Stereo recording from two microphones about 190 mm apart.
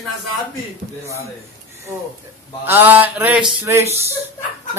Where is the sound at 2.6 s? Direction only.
10° right (ahead or behind).